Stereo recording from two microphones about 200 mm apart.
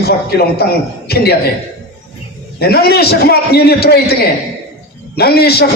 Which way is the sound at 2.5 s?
50° left (ahead or behind).